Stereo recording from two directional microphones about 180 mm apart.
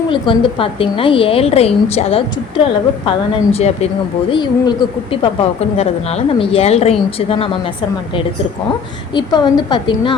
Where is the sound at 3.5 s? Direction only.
35° left (ahead or behind).